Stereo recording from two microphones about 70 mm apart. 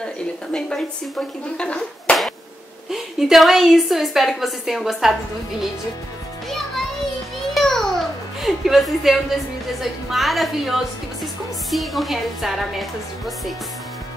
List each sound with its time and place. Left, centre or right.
0.0 s a woman's voice: centre
1.6 s speech: centre
2.9 s a woman's voice: centre
7.5 s a sound: centre
8.4 s a woman's voice: centre